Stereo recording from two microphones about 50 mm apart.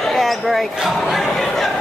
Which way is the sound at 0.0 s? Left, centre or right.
Centre.